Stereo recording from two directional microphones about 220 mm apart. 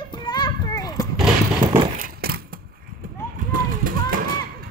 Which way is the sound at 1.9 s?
40° right (ahead or behind).